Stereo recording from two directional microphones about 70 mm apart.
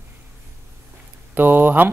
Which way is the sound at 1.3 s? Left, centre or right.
Right.